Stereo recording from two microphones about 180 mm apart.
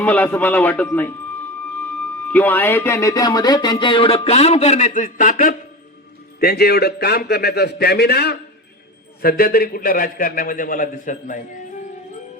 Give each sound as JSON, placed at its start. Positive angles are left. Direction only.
{"t": 0.0, "sound": "a man's voice", "side_deg": 10}